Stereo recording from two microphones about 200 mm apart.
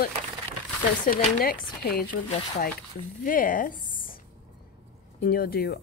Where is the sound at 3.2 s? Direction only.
45° left (ahead or behind).